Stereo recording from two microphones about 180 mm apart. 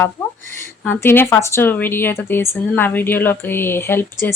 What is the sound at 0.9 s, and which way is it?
Speech, 10° left (ahead or behind).